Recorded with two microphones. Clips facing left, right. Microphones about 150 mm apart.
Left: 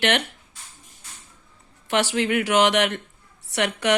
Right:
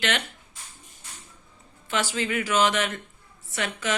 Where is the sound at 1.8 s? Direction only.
70° left (ahead or behind).